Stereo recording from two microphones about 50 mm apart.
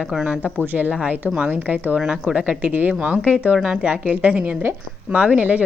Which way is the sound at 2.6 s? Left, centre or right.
Right.